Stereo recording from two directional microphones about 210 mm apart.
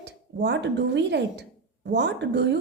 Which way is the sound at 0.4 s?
55° right (ahead or behind).